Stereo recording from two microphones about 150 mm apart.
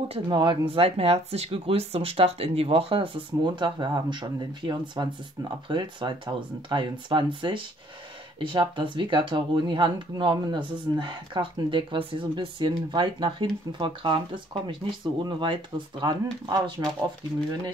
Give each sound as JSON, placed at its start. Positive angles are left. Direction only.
{"t": 0.1, "sound": "speech", "side_deg": -35}